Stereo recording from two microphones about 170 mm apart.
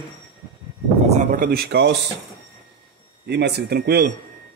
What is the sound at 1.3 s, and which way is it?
Speech, 60° right (ahead or behind).